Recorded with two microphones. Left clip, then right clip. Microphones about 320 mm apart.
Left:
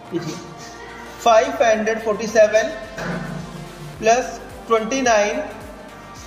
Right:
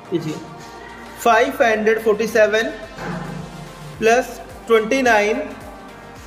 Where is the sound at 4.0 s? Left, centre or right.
Right.